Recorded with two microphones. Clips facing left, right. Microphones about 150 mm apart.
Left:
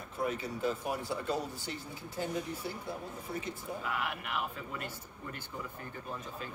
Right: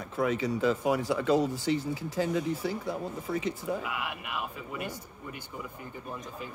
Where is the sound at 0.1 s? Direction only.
90° right.